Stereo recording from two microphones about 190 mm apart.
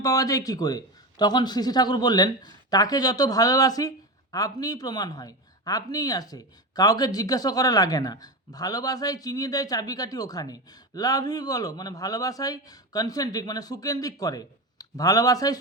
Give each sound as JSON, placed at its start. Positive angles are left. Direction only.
{"t": 0.0, "sound": "speech", "side_deg": 20}